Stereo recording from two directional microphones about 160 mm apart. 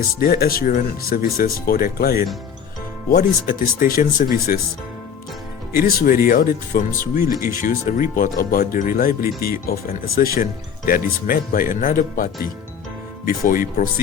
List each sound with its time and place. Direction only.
0.2 s speech: 65° left (ahead or behind)
5.8 s speech: 65° left (ahead or behind)
7.3 s speech: 20° right (ahead or behind)
7.6 s speech: 60° left (ahead or behind)